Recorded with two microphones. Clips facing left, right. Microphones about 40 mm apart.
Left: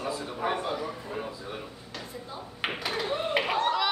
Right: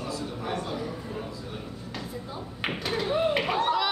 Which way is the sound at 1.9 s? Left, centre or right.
Centre.